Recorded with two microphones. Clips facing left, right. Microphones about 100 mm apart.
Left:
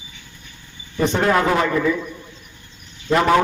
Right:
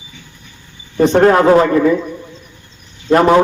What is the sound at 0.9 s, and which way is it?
A man's voice, 50° right (ahead or behind).